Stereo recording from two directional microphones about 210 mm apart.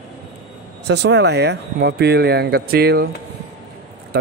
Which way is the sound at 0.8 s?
55° right (ahead or behind).